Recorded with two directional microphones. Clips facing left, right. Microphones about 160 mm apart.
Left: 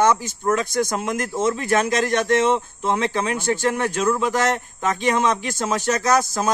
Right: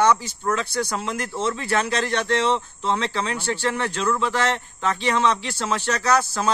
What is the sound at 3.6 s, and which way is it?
Speech, 15° left (ahead or behind).